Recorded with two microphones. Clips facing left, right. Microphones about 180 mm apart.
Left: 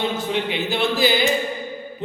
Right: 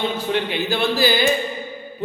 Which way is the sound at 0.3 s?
20° left (ahead or behind).